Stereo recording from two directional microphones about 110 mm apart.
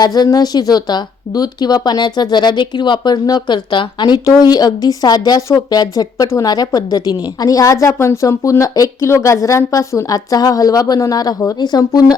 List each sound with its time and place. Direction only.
0.0 s speech: 35° left (ahead or behind)